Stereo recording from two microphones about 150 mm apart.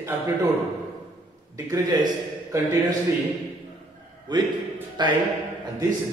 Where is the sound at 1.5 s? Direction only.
25° right (ahead or behind).